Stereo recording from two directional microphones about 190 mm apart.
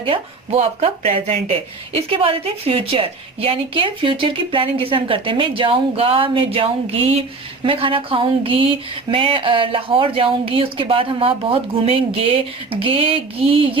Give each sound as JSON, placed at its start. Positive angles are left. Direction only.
{"t": 0.0, "sound": "a woman's voice", "side_deg": -30}